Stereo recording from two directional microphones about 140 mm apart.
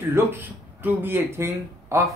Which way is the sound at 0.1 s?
15° right (ahead or behind).